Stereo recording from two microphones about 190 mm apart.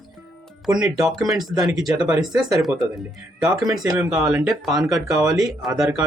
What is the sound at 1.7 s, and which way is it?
Speech, 5° right (ahead or behind).